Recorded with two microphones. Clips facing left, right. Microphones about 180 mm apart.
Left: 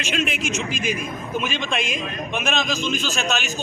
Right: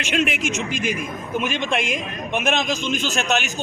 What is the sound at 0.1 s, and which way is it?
Speech, 70° right (ahead or behind).